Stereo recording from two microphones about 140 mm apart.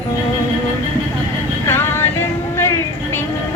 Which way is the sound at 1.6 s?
15° left (ahead or behind).